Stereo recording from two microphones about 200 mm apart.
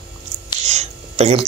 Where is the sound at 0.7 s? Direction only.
35° right (ahead or behind).